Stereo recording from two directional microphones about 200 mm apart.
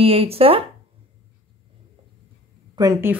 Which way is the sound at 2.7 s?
15° right (ahead or behind).